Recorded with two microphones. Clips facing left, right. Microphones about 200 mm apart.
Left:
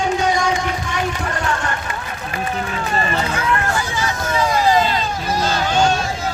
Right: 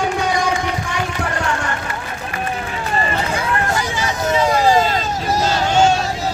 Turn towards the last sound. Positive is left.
turn(degrees=-40)  # may be behind; listen again after turning